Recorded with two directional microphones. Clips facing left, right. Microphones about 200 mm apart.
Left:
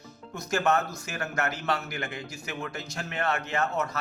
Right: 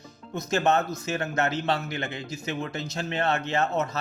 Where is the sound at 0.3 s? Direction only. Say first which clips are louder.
Right 2 dB; 25° right (ahead or behind).